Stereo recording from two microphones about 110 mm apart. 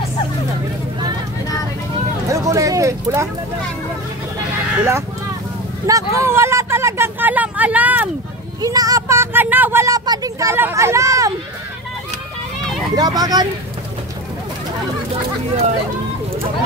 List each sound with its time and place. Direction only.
2.2 s a sound: 30° right (ahead or behind)
4.7 s speech: 25° right (ahead or behind)
5.9 s a sound: 30° right (ahead or behind)
8.5 s speech: 35° right (ahead or behind)
10.5 s speech: 25° right (ahead or behind)
12.9 s speech: 35° right (ahead or behind)